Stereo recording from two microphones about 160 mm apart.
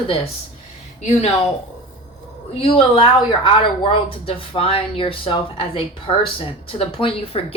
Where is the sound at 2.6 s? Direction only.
35° left (ahead or behind).